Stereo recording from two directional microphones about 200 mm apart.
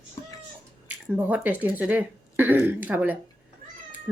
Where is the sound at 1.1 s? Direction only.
10° right (ahead or behind).